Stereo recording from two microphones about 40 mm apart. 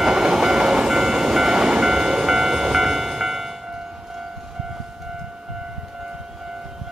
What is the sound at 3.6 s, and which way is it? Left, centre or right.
Train, centre.